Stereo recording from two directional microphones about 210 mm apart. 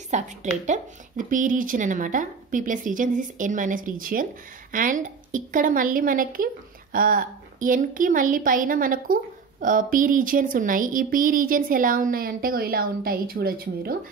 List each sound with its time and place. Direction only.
0.1 s a woman's voice: 35° right (ahead or behind)